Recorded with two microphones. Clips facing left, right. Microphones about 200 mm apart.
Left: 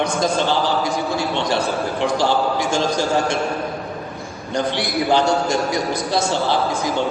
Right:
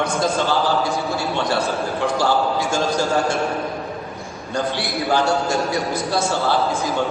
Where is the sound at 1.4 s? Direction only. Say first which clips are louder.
Right 1 dB; 20° left (ahead or behind).